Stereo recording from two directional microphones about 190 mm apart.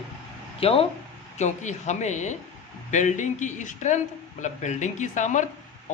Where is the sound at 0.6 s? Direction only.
30° left (ahead or behind).